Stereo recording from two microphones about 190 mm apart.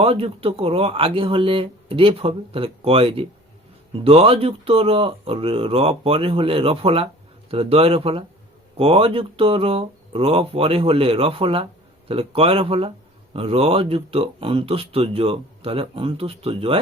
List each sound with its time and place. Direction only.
0.0 s a man's voice: 30° right (ahead or behind)